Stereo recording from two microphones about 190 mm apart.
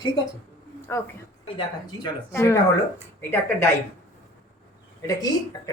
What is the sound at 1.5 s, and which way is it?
Speech, 20° left (ahead or behind).